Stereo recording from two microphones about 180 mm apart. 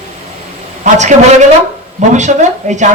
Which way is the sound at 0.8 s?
40° right (ahead or behind).